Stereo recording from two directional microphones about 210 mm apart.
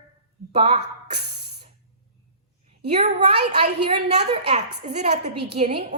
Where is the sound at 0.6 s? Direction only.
30° right (ahead or behind).